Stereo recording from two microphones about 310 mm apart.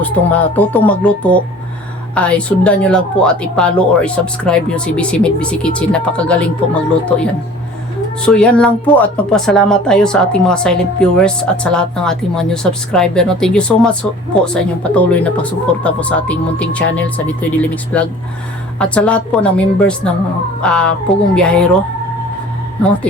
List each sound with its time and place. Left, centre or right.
0.0 s speech: centre
8.2 s speech: centre